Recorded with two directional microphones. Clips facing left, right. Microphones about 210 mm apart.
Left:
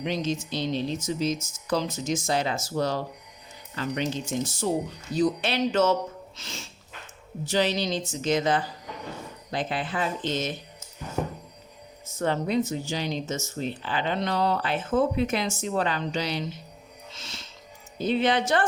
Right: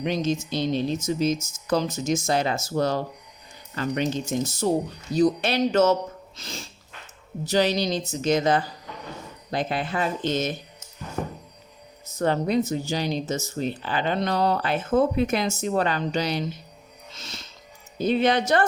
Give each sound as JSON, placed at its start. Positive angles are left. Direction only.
{"t": 0.0, "sound": "speech", "side_deg": -50}
{"t": 12.2, "sound": "speech", "side_deg": -40}